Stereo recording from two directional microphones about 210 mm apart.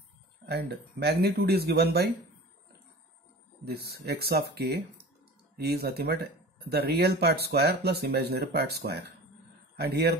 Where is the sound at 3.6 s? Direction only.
50° right (ahead or behind).